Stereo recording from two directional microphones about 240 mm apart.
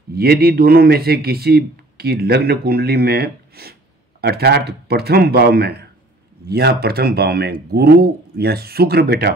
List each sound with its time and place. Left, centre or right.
0.1 s speech: right